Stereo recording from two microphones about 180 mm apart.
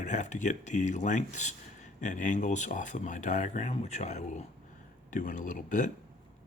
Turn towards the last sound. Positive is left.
turn(degrees=45)  # may be behind; listen again after turning